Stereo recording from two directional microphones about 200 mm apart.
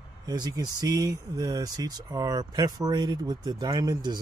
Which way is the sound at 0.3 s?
20° right (ahead or behind).